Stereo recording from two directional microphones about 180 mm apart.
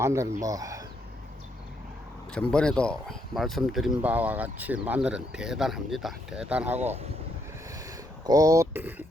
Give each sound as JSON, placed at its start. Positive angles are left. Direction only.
{"t": 0.0, "sound": "speech", "side_deg": -15}
{"t": 2.3, "sound": "speech", "side_deg": 5}
{"t": 6.7, "sound": "speech", "side_deg": -40}
{"t": 8.3, "sound": "speech", "side_deg": -20}